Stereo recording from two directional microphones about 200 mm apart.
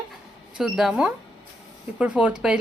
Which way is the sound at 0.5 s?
Centre (ahead or behind).